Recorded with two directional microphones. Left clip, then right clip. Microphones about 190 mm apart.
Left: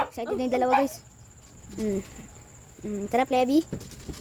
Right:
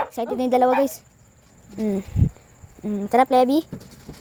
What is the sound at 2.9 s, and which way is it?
Speech, 15° right (ahead or behind).